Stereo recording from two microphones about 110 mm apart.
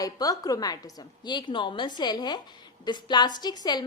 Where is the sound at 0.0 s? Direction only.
35° left (ahead or behind).